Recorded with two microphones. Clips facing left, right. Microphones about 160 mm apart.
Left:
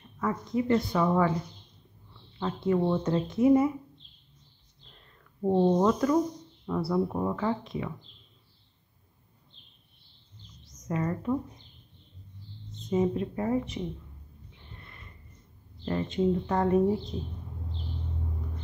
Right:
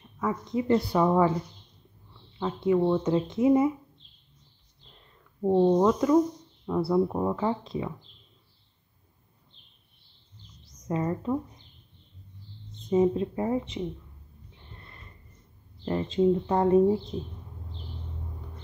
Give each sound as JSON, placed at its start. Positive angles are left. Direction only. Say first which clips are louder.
{"t": 0.5, "sound": "speech", "louder": "right 1 dB", "side_deg": -25}
{"t": 2.3, "sound": "speech", "louder": "right 3 dB", "side_deg": -15}
{"t": 5.4, "sound": "speech", "louder": "right 2 dB", "side_deg": 0}
{"t": 5.8, "sound": "speech", "louder": "right 3 dB", "side_deg": -20}
{"t": 10.9, "sound": "speech", "louder": "right 1 dB", "side_deg": -25}
{"t": 12.9, "sound": "speech", "louder": "right 4 dB", "side_deg": -25}
{"t": 15.8, "sound": "speech", "louder": "right 3 dB", "side_deg": -25}